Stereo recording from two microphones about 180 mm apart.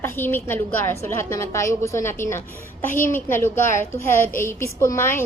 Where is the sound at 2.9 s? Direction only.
45° left (ahead or behind).